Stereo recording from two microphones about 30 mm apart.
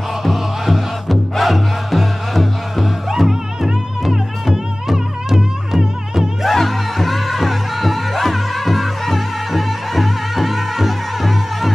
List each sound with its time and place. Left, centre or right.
0.2 s music: centre
6.5 s music: centre